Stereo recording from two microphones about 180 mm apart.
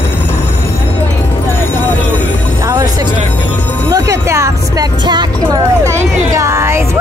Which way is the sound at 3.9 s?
20° right (ahead or behind).